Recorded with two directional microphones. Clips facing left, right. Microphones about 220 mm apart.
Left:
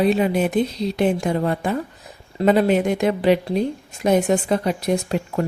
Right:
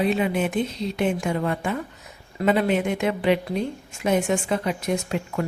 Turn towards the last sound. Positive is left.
turn(degrees=35)  # may be behind; listen again after turning